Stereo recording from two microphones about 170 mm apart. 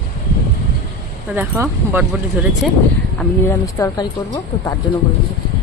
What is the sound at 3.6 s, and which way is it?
Speech, 20° left (ahead or behind).